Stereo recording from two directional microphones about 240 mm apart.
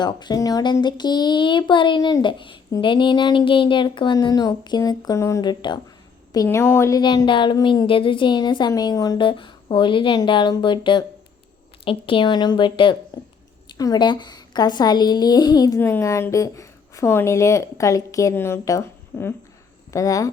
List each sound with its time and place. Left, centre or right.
0.0 s a woman's voice: centre